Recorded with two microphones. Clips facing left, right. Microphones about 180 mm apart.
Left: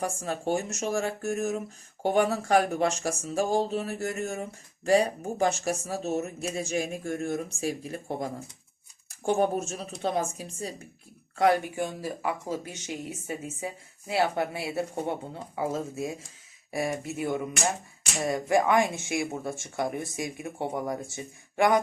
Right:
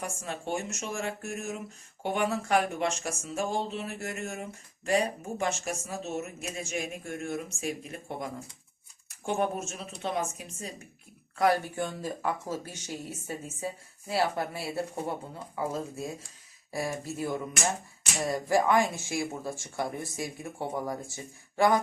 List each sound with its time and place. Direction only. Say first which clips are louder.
0.0 s speech: left 6 dB; 35° left (ahead or behind)
11.3 s speech: left 2 dB; 20° left (ahead or behind)